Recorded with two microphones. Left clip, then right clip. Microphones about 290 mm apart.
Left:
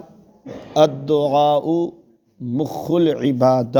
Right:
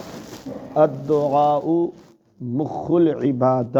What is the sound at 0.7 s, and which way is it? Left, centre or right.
A man's voice, left.